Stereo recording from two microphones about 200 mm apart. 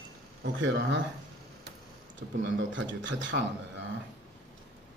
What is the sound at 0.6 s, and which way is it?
Speech, 70° right (ahead or behind).